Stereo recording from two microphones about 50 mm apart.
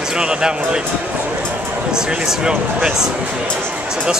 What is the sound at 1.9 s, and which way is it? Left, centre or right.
Speech, centre.